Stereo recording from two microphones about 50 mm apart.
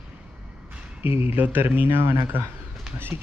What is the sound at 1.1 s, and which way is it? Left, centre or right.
Speech, right.